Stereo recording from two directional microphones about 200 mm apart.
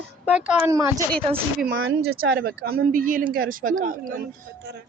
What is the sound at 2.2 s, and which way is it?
Speech, 50° right (ahead or behind).